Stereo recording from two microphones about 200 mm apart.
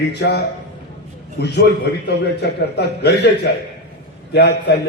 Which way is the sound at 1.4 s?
55° left (ahead or behind).